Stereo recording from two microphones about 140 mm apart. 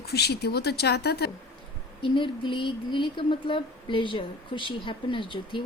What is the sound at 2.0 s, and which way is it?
Speech, 35° left (ahead or behind).